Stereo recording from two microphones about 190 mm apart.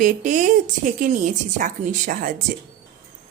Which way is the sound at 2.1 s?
45° right (ahead or behind).